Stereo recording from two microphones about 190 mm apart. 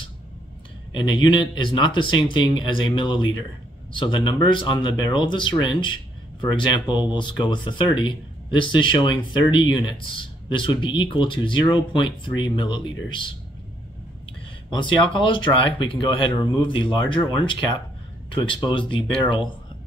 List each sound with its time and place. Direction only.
0.9 s speech: 25° left (ahead or behind)
14.7 s speech: 25° left (ahead or behind)